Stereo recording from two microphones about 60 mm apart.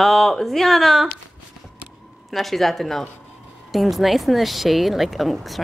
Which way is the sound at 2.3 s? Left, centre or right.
Centre.